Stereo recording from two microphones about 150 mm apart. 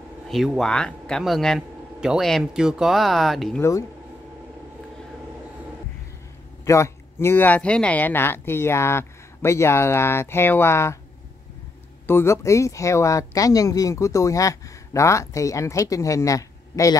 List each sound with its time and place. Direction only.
0.3 s speech: centre (ahead or behind)
6.6 s speech: 20° left (ahead or behind)
12.1 s speech: 15° left (ahead or behind)